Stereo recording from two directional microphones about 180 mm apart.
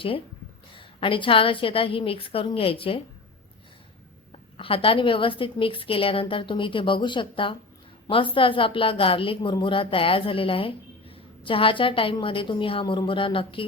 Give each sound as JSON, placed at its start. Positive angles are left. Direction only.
{"t": 0.8, "sound": "a woman's voice", "side_deg": 30}
{"t": 4.5, "sound": "a woman's voice", "side_deg": 30}